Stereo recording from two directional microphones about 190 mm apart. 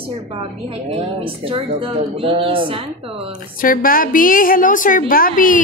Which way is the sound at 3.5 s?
45° left (ahead or behind).